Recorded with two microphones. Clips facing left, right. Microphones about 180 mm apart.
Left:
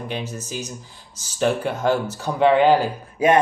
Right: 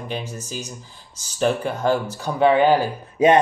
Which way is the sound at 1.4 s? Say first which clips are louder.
Even; 5° left (ahead or behind).